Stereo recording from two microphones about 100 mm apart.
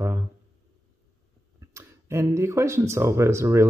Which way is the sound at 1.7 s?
30° right (ahead or behind).